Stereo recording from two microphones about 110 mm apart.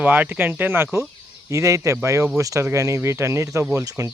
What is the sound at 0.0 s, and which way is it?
Speech, 15° right (ahead or behind).